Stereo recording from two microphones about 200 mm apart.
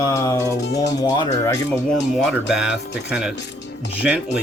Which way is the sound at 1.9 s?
Centre (ahead or behind).